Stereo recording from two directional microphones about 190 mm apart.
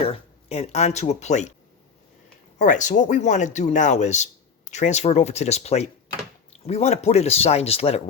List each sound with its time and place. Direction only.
0.0 s speech: 30° left (ahead or behind)
2.6 s speech: 40° left (ahead or behind)